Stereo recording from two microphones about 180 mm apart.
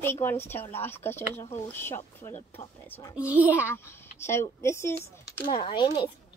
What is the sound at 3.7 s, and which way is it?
Speech, 15° left (ahead or behind).